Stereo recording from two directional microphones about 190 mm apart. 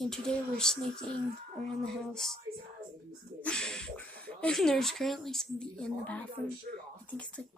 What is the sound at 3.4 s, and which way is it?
Speech, 5° left (ahead or behind).